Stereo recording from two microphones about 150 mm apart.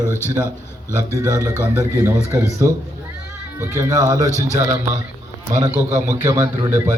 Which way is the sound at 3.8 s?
20° right (ahead or behind).